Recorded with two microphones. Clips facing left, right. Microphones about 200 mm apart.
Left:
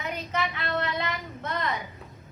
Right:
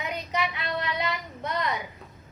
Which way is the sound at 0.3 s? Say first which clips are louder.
Even; 15° right (ahead or behind).